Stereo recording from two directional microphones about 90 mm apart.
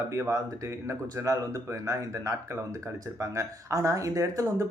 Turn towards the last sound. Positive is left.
turn(degrees=-35)  # may be behind; listen again after turning